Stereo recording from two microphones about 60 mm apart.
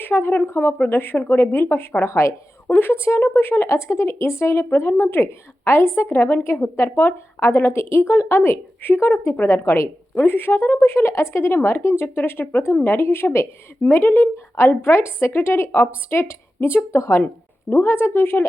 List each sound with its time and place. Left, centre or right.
0.0 s a woman's voice: left
2.0 s speech: left
2.6 s speech: left
2.9 s a woman's voice: left
10.2 s a woman's voice: left
17.7 s a woman's voice: left